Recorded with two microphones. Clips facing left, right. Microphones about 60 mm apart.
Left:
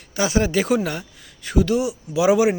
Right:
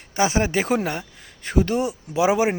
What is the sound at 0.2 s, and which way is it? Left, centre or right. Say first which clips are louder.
Speech: left 1 dB; right.